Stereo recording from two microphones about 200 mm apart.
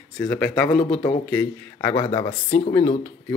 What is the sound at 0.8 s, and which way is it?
Speech, 30° left (ahead or behind).